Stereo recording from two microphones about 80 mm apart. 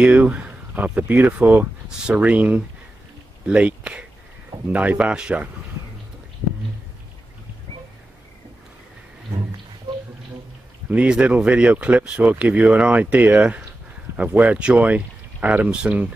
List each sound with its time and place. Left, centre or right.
0.0 s speech: centre
10.9 s speech: centre